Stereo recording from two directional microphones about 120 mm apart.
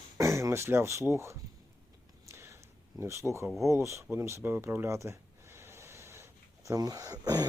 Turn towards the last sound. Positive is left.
turn(degrees=-30)  # may be behind; listen again after turning